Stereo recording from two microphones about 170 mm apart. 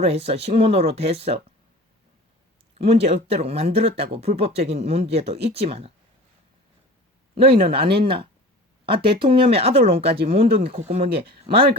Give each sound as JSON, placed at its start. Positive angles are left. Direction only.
{"t": 0.0, "sound": "speech", "side_deg": -35}
{"t": 2.7, "sound": "speech", "side_deg": -35}
{"t": 7.4, "sound": "speech", "side_deg": -35}